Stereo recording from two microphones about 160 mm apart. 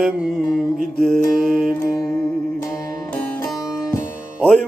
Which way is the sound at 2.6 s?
20° left (ahead or behind).